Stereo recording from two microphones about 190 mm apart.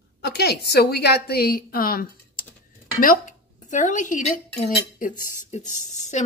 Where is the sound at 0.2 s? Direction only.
60° left (ahead or behind).